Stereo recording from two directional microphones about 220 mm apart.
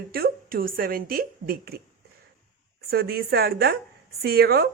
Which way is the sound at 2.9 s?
45° right (ahead or behind).